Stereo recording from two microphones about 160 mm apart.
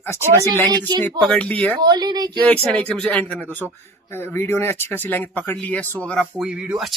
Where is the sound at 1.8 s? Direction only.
25° right (ahead or behind).